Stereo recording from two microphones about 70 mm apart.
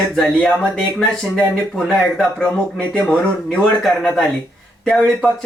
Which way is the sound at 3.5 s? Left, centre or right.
Centre.